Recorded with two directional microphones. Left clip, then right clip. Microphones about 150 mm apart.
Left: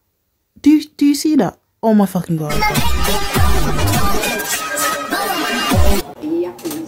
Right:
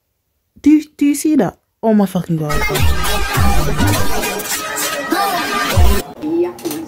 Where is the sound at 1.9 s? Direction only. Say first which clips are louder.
Even; 10° right (ahead or behind).